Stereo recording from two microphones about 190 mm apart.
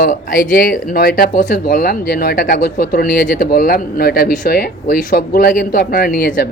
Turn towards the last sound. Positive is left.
turn(degrees=50)  # may be behind; listen again after turning